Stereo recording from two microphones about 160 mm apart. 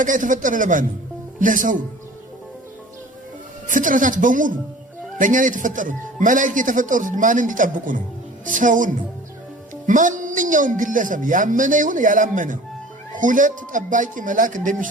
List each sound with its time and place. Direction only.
0.0 s a man's voice: 55° right (ahead or behind)
3.7 s a man's voice: 55° right (ahead or behind)